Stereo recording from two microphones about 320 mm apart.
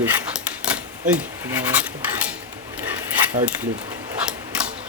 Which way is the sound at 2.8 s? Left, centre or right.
Centre.